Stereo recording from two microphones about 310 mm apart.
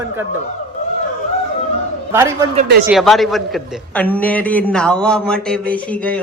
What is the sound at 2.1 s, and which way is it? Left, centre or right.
Speech, centre.